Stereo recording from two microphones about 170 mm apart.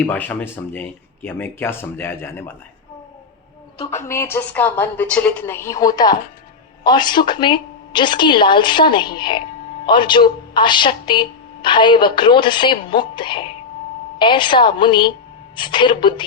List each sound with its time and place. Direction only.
0.0 s speech: 10° left (ahead or behind)
3.8 s a woman's voice: 15° left (ahead or behind)